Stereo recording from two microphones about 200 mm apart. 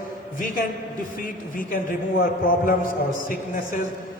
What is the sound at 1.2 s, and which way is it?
A man's voice, 45° left (ahead or behind).